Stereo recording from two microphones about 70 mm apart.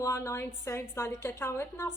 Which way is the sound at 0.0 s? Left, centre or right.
Left.